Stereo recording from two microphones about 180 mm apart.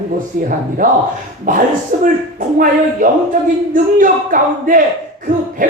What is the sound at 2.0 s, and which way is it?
Speech, 50° right (ahead or behind).